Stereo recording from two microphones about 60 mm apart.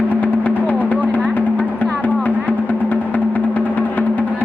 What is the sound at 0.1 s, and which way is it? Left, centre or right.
Music, left.